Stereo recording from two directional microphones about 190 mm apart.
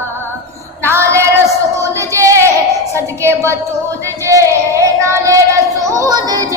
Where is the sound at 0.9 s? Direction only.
15° right (ahead or behind).